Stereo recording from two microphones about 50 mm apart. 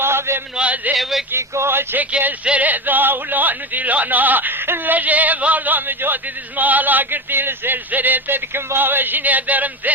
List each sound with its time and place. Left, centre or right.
0.0 s a sound: right
0.5 s a man's voice: right
1.4 s speech: right
2.0 s speech: right
4.9 s speech: right